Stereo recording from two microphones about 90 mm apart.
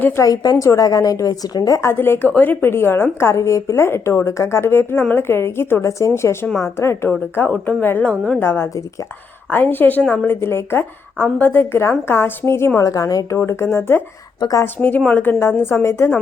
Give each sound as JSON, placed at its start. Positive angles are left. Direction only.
{"t": 0.2, "sound": "a woman's voice", "side_deg": 40}
{"t": 1.9, "sound": "a woman's voice", "side_deg": 25}
{"t": 8.4, "sound": "a woman's voice", "side_deg": 25}
{"t": 13.3, "sound": "a woman's voice", "side_deg": 30}
{"t": 14.8, "sound": "a woman's voice", "side_deg": 15}